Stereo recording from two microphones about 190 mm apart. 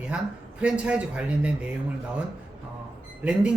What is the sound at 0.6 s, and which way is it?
A man's voice, 5° right (ahead or behind).